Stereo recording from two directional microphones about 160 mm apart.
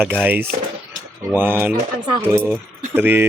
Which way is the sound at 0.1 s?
10° right (ahead or behind).